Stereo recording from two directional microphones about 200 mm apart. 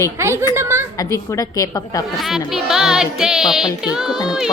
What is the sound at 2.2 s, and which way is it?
Music, centre (ahead or behind).